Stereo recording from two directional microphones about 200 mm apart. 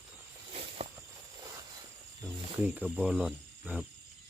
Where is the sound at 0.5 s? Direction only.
30° right (ahead or behind).